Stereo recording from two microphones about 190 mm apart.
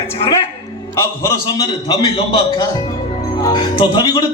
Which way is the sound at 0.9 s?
15° left (ahead or behind).